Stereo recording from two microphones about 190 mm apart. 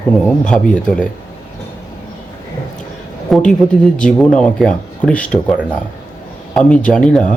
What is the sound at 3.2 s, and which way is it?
A woman's voice, centre (ahead or behind).